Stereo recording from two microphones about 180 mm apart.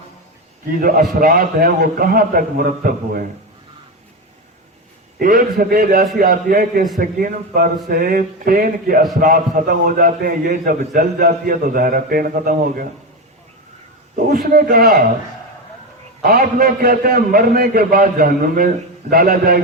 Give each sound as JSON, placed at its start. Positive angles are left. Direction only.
{"t": 0.7, "sound": "a man's voice", "side_deg": -50}
{"t": 5.2, "sound": "a man's voice", "side_deg": -50}
{"t": 14.3, "sound": "a man's voice", "side_deg": -55}
{"t": 16.2, "sound": "a man's voice", "side_deg": -55}